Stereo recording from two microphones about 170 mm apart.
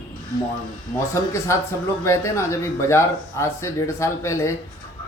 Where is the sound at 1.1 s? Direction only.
15° left (ahead or behind).